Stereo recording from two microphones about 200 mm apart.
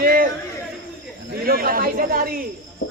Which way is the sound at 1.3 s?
45° right (ahead or behind).